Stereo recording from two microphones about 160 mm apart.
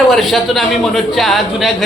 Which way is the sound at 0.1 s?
Centre (ahead or behind).